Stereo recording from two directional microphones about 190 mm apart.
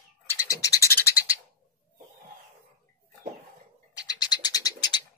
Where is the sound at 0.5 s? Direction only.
20° left (ahead or behind).